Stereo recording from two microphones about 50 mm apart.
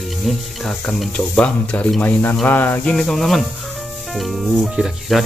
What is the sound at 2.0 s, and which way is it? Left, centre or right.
Speech, left.